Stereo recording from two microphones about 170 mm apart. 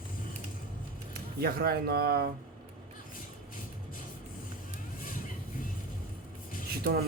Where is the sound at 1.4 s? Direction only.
65° right (ahead or behind).